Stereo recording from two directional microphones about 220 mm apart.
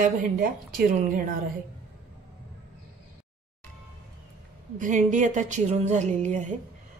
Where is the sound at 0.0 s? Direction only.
40° right (ahead or behind).